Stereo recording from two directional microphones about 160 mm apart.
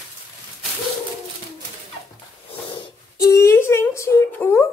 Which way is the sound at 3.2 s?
20° left (ahead or behind).